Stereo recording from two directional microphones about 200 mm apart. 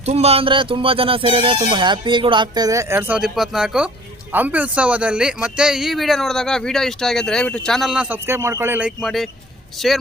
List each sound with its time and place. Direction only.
0.0 s speech: 30° right (ahead or behind); by 10.0 s centre (ahead or behind)